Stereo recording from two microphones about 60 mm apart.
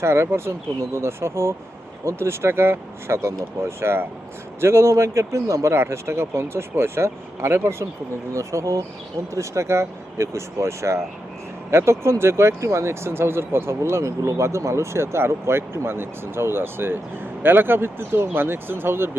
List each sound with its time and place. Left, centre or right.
0.0 s speech: right
8.3 s speech: right